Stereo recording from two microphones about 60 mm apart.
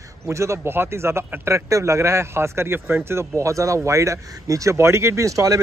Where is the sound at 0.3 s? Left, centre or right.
Right.